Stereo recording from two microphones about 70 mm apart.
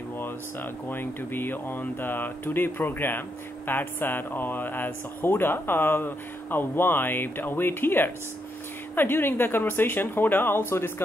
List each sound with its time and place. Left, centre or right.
0.2 s speech: left